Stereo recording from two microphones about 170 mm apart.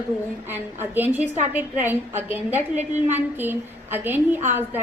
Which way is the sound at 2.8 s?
45° right (ahead or behind).